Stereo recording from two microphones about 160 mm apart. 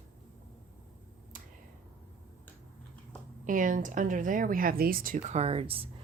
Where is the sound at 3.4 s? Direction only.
55° right (ahead or behind).